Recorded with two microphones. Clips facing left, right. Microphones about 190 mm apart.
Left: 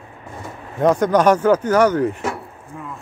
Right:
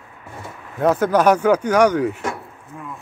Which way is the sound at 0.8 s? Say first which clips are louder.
Left 1 dB; 5° right (ahead or behind).